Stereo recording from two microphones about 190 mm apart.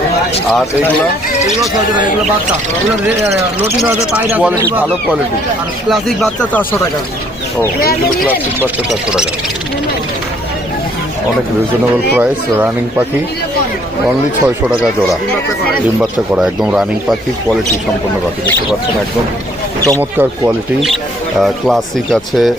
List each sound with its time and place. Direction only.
3.8 s speech: 5° right (ahead or behind)
5.9 s speech: centre (ahead or behind)
7.8 s speech: 50° left (ahead or behind)
8.2 s speech: 10° right (ahead or behind)
12.1 s speech: 10° right (ahead or behind)
14.4 s speech: 5° right (ahead or behind)
19.8 s speech: 15° right (ahead or behind)
20.9 s speech: centre (ahead or behind)